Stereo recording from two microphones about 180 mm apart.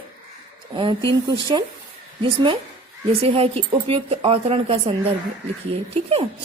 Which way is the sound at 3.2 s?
30° right (ahead or behind).